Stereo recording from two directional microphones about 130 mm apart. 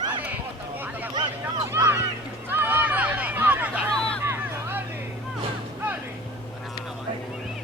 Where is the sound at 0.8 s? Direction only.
15° right (ahead or behind).